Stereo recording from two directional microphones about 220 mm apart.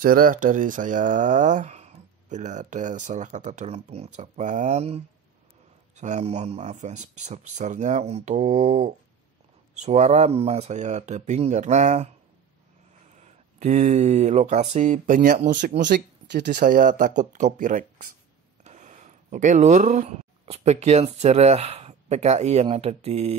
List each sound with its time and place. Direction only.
0.0 s speech: 40° right (ahead or behind)
13.1 s speech: 30° right (ahead or behind)
15.8 s speech: 50° right (ahead or behind); by 23.3 s 30° right (ahead or behind)